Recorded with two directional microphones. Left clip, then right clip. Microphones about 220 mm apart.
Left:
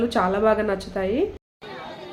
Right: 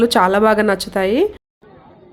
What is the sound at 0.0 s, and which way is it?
A woman's voice, 50° right (ahead or behind).